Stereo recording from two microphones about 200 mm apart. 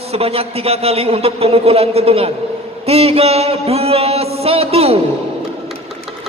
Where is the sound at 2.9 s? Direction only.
30° right (ahead or behind).